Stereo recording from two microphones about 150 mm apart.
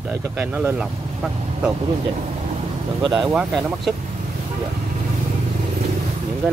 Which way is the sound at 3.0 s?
30° right (ahead or behind).